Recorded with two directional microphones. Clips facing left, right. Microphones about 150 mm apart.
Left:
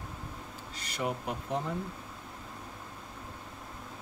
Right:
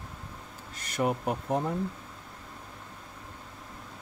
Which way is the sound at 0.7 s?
50° right (ahead or behind).